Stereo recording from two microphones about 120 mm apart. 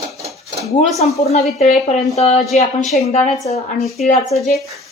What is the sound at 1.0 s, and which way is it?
A man's voice, 65° left (ahead or behind).